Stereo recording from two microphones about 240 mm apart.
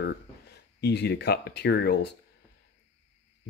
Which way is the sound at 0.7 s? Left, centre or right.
Left.